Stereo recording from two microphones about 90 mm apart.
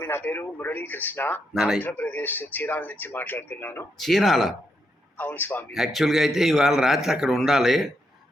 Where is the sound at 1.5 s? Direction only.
5° right (ahead or behind).